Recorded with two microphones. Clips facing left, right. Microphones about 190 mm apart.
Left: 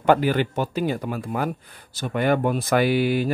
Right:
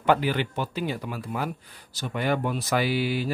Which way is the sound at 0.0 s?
45° left (ahead or behind).